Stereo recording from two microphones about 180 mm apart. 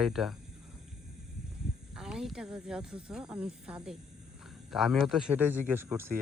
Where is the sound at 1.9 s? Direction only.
5° right (ahead or behind).